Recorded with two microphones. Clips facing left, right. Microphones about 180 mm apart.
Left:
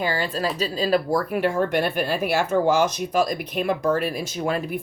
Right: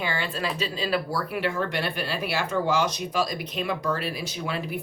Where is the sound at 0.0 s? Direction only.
40° left (ahead or behind).